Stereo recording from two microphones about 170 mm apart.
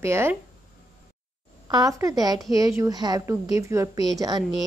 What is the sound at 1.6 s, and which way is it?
A woman's voice, 20° right (ahead or behind).